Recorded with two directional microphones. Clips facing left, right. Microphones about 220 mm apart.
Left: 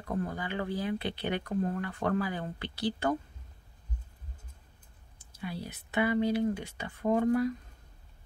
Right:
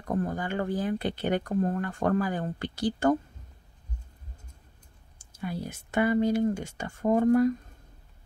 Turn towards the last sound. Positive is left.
turn(degrees=-45)  # may be behind; listen again after turning